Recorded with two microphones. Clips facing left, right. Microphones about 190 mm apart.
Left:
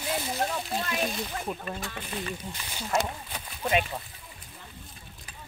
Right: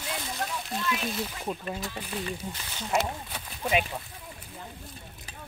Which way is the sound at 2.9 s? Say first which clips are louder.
Right 1 dB; 5° right (ahead or behind).